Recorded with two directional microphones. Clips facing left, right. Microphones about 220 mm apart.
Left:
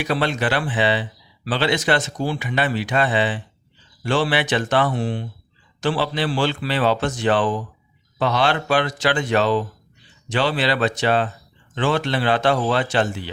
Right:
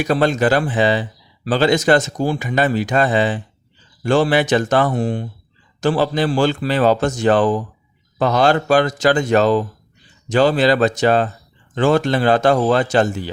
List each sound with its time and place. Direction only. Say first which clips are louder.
0.0 s speech: right 6 dB; 45° right (ahead or behind)